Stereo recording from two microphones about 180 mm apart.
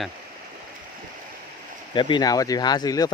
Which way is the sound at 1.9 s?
25° left (ahead or behind).